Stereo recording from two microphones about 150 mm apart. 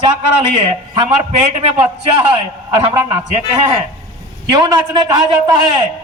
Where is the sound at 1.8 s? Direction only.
30° right (ahead or behind).